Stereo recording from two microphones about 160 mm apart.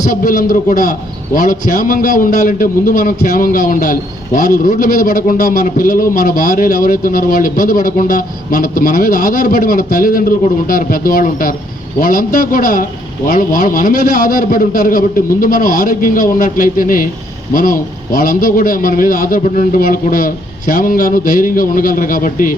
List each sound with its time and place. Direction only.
0.1 s a man's voice: 55° left (ahead or behind)